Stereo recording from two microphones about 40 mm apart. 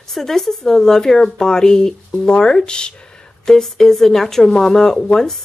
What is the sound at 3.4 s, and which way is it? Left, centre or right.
Speech, centre.